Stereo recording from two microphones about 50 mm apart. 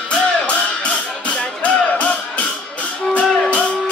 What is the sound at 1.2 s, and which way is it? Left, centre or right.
Music, left.